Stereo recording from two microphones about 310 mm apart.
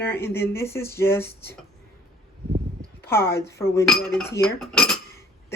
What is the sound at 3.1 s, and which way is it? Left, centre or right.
Cutlery, centre.